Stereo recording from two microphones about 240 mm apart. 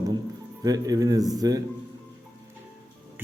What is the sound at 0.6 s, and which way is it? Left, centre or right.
Speech, centre.